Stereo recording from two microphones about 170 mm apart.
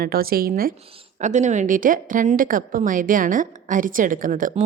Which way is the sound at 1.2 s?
45° right (ahead or behind).